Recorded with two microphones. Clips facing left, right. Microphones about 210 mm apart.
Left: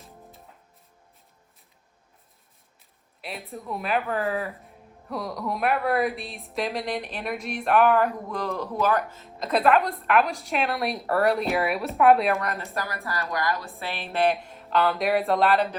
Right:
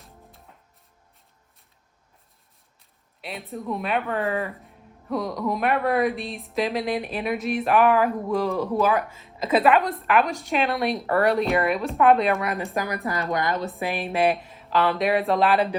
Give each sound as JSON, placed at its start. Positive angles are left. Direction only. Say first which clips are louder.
{"t": 3.2, "sound": "speech", "louder": "right 3 dB", "side_deg": 0}
{"t": 12.7, "sound": "a woman's voice", "louder": "right 5 dB", "side_deg": -20}
{"t": 14.0, "sound": "speech", "louder": "even", "side_deg": -5}